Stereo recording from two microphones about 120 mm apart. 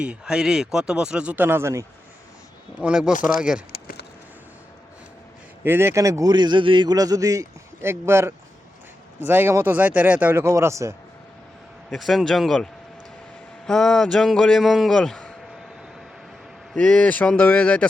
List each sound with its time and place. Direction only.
0.0 s speech: 10° right (ahead or behind); by 1.9 s 25° right (ahead or behind)
2.8 s speech: 5° right (ahead or behind)
5.6 s a man's voice: 20° right (ahead or behind)
11.9 s a man's voice: centre (ahead or behind)
13.7 s a man's voice: 5° left (ahead or behind)
16.7 s speech: 10° left (ahead or behind)